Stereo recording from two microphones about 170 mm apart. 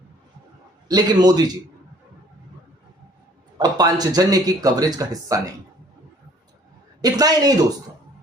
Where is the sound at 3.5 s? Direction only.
25° right (ahead or behind).